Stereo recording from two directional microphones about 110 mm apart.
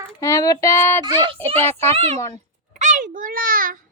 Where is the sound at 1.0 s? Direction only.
45° right (ahead or behind).